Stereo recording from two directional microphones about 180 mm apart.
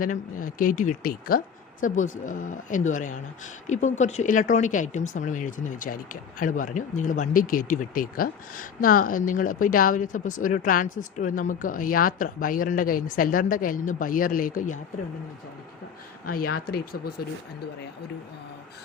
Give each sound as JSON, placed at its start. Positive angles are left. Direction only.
{"t": 0.0, "sound": "speech", "side_deg": 50}
{"t": 16.4, "sound": "speech", "side_deg": 60}